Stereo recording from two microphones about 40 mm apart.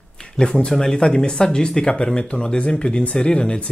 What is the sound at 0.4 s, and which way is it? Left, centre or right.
Speech, left.